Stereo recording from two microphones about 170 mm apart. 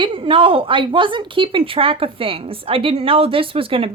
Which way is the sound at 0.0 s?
30° right (ahead or behind).